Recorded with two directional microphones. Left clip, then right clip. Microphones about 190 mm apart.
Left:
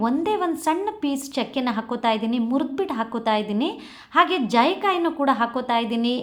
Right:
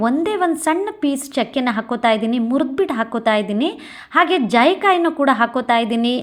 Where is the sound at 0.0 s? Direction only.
20° right (ahead or behind).